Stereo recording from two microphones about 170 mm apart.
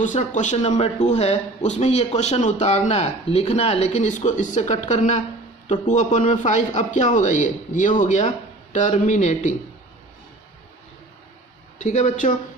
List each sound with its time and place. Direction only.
0.0 s a man's voice: 45° left (ahead or behind)
11.8 s a man's voice: 45° left (ahead or behind)